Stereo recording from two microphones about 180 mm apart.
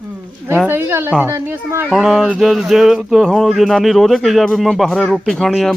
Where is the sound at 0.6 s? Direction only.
15° right (ahead or behind).